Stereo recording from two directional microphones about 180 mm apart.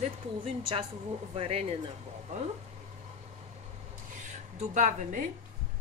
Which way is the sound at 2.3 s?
40° right (ahead or behind).